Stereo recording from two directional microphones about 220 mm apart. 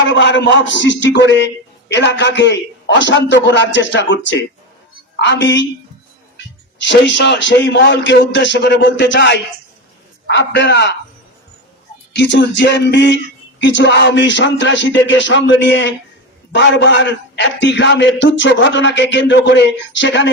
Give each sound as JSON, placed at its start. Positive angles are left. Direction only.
{"t": 0.0, "sound": "a man's voice", "side_deg": 55}
{"t": 6.8, "sound": "speech", "side_deg": 55}
{"t": 12.1, "sound": "a man's voice", "side_deg": 55}